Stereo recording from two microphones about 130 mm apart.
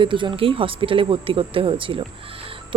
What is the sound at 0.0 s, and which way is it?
A woman's voice, 40° right (ahead or behind).